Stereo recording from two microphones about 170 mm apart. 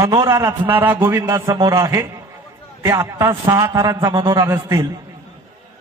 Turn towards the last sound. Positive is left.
turn(degrees=-15)  # may be behind; listen again after turning